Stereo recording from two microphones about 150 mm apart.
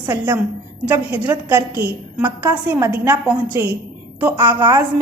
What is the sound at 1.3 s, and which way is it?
Speech, 15° right (ahead or behind).